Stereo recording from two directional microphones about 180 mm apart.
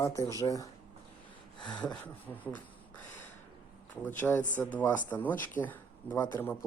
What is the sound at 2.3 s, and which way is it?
Speech, 10° left (ahead or behind).